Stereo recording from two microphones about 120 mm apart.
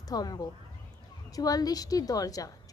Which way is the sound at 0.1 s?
30° left (ahead or behind).